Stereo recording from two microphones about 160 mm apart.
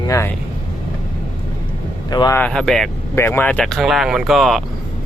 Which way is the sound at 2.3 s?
5° left (ahead or behind).